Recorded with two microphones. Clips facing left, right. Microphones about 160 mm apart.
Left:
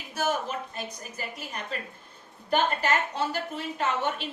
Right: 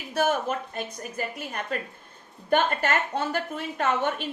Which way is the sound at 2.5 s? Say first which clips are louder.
Right 2 dB; 55° right (ahead or behind).